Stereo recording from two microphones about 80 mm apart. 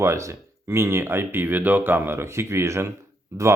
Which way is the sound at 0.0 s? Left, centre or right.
Right.